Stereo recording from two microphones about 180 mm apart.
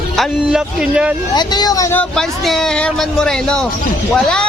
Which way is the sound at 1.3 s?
25° left (ahead or behind).